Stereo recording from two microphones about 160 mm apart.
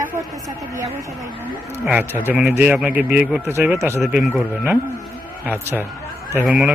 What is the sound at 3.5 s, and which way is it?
Speech, 15° right (ahead or behind).